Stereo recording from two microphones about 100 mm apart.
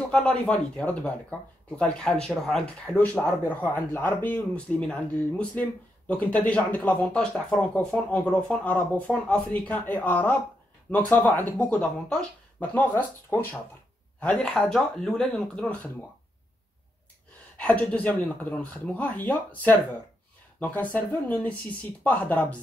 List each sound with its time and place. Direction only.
0.1 s speech: 10° left (ahead or behind)
17.6 s speech: 15° left (ahead or behind)